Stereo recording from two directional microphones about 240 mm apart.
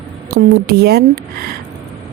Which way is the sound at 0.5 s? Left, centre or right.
Right.